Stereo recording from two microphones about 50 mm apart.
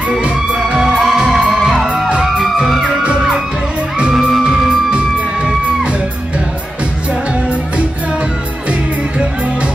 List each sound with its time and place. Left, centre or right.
0.7 s music: centre
2.4 s music: centre
4.1 s music: centre